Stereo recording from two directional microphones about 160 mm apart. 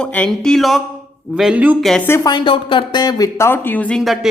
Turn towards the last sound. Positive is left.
turn(degrees=0)  # may be behind; listen again after turning